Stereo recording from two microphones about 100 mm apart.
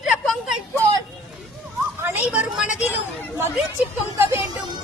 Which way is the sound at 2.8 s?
20° right (ahead or behind).